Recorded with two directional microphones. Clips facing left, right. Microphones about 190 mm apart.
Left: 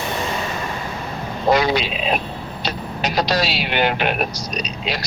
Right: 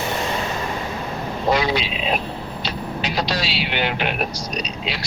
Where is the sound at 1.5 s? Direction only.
45° left (ahead or behind).